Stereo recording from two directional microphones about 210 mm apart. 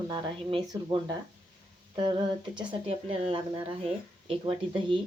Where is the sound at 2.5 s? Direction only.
25° right (ahead or behind).